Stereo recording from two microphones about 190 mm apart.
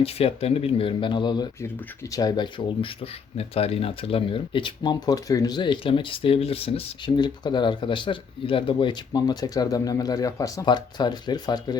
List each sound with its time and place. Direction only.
0.0 s speech: 30° left (ahead or behind)